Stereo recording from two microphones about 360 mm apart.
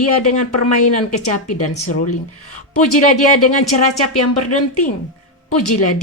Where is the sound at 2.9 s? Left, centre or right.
Left.